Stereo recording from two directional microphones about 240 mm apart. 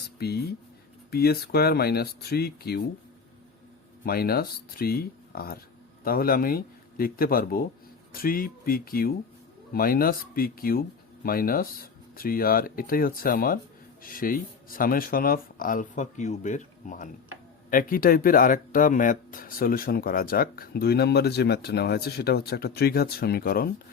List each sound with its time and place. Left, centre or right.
0.2 s speech: left
4.0 s speech: left